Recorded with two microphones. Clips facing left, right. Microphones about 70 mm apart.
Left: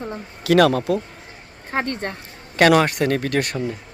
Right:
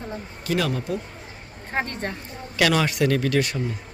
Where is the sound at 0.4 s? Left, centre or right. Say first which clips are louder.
Left 10 dB; left.